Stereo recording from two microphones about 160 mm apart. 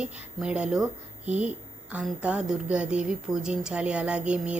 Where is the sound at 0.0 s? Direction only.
5° right (ahead or behind).